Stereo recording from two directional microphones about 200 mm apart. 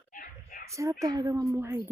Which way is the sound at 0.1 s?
40° left (ahead or behind).